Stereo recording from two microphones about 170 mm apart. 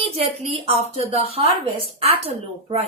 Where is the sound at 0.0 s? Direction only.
35° right (ahead or behind).